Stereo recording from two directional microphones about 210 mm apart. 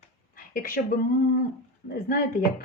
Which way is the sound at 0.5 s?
40° left (ahead or behind).